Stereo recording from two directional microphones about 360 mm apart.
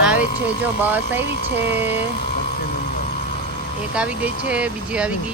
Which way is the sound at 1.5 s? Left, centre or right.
Right.